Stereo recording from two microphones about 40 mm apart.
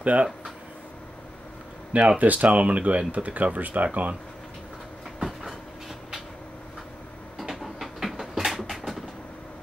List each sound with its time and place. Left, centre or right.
0.0 s speech: right
1.9 s speech: right
7.3 s a sound: centre